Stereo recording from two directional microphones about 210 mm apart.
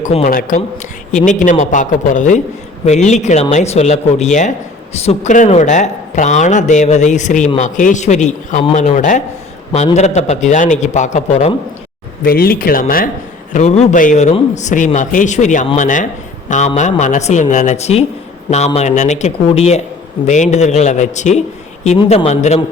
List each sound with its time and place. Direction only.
0.0 s speech: 30° left (ahead or behind)
0.3 s speech: 40° left (ahead or behind)
12.2 s speech: 45° left (ahead or behind)